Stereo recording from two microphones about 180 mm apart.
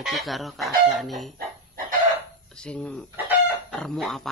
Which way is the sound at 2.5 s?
5° left (ahead or behind).